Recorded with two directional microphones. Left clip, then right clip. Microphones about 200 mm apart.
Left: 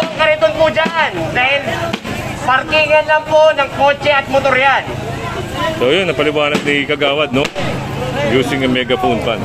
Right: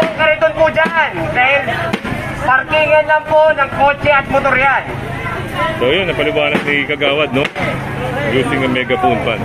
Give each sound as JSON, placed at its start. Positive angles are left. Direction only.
{"t": 0.2, "sound": "a sound", "side_deg": 5}
{"t": 2.5, "sound": "a man's voice", "side_deg": 20}
{"t": 5.8, "sound": "speech", "side_deg": 25}
{"t": 8.4, "sound": "speech", "side_deg": 30}